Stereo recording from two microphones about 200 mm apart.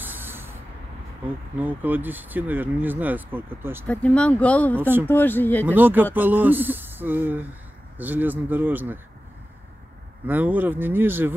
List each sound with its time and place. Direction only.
0.0 s vehicle: 10° right (ahead or behind)
1.6 s speech: 10° right (ahead or behind)
3.8 s speech: 5° left (ahead or behind)
4.7 s speech: 10° right (ahead or behind)
5.0 s speech: 10° left (ahead or behind)
5.7 s speech: 10° right (ahead or behind)
10.2 s speech: 10° right (ahead or behind)